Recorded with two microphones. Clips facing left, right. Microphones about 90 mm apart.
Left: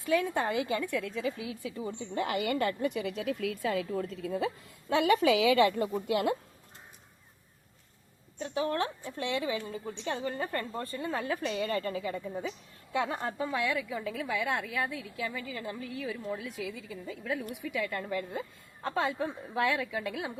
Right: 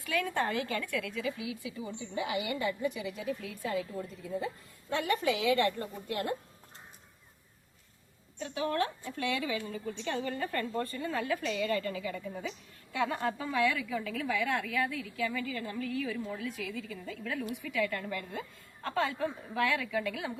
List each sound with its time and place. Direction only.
0.0 s a woman's voice: 25° left (ahead or behind); by 5.0 s 90° left
8.4 s a woman's voice: 30° left (ahead or behind)